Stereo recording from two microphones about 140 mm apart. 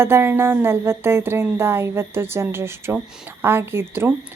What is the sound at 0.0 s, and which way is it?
A woman's voice, 15° right (ahead or behind).